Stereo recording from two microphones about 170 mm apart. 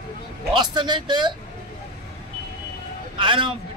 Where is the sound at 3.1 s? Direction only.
30° right (ahead or behind).